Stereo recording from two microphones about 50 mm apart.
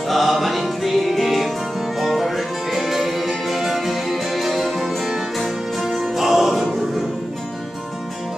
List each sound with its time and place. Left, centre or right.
0.1 s music: centre